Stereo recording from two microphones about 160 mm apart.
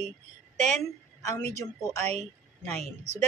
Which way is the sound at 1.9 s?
45° right (ahead or behind).